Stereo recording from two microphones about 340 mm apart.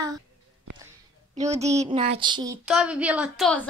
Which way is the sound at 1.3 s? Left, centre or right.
Centre.